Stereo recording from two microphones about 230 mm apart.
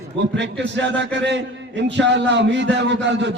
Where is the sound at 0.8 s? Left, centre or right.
Right.